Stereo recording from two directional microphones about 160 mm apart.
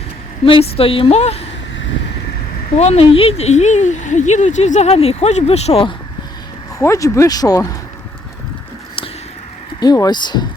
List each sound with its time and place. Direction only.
0.4 s a woman's voice: 35° left (ahead or behind)
2.7 s speech: 40° left (ahead or behind)
6.7 s speech: 20° left (ahead or behind)
9.8 s speech: 25° left (ahead or behind)